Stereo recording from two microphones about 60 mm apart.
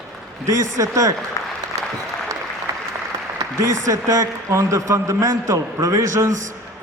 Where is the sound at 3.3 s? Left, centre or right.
Right.